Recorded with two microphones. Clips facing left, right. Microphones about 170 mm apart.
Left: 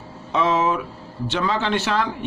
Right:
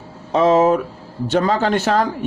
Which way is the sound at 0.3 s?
40° right (ahead or behind).